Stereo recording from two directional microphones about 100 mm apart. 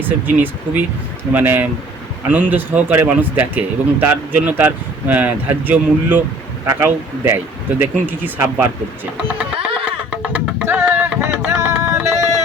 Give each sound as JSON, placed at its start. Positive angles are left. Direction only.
{"t": 0.0, "sound": "speech", "side_deg": -20}
{"t": 9.8, "sound": "music", "side_deg": -15}